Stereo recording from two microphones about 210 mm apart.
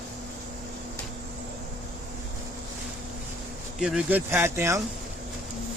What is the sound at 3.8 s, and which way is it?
Speech, 5° right (ahead or behind).